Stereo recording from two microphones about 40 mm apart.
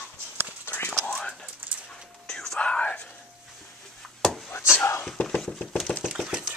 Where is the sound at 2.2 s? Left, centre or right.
Centre.